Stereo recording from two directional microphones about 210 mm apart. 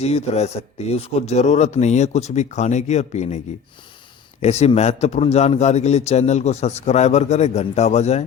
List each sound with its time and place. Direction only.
0.0 s a man's voice: 30° left (ahead or behind)